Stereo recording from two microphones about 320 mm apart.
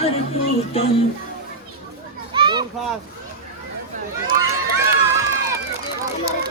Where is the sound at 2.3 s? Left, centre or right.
Centre.